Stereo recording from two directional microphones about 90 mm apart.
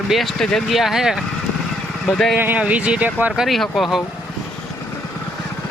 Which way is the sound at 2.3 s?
20° right (ahead or behind).